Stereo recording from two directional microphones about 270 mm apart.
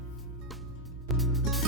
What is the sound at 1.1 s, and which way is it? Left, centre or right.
Music, centre.